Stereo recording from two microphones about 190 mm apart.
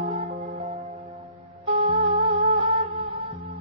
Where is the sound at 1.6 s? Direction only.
30° right (ahead or behind).